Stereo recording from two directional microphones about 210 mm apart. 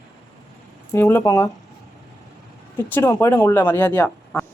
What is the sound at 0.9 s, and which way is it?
Speech, 10° left (ahead or behind).